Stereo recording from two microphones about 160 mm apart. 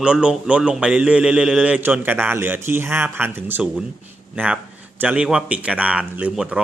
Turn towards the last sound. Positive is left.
turn(degrees=-5)  # may be behind; listen again after turning